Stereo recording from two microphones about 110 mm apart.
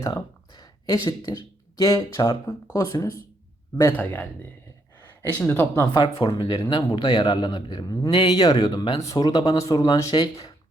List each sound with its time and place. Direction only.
0.0 s speech: 40° left (ahead or behind)
3.9 s a man's voice: 15° left (ahead or behind)
5.5 s speech: 20° left (ahead or behind)
5.9 s a man's voice: 45° left (ahead or behind)